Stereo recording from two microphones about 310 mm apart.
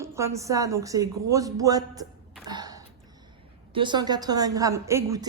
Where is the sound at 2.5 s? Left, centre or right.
Centre.